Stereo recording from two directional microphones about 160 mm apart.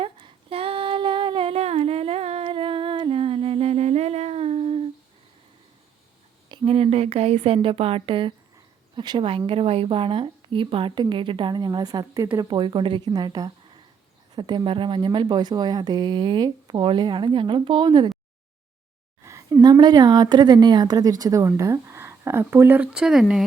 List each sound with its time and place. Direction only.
0.0 s female singing: 35° right (ahead or behind)
6.5 s a woman's voice: 35° right (ahead or behind)
19.2 s a woman's voice: 20° right (ahead or behind)